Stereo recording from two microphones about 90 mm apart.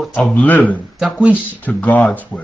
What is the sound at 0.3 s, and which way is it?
A man's voice, 20° left (ahead or behind).